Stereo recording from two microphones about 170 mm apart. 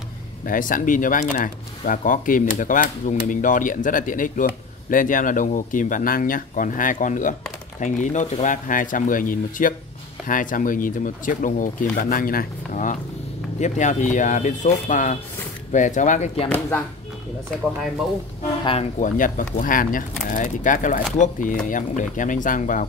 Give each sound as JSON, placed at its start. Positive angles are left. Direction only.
{"t": 0.5, "sound": "speech", "side_deg": 50}
{"t": 16.4, "sound": "speech", "side_deg": 10}
{"t": 18.6, "sound": "speech", "side_deg": 30}
{"t": 18.9, "sound": "speech", "side_deg": 50}